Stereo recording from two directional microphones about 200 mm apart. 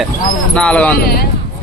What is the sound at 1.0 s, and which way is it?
Speech, 50° left (ahead or behind).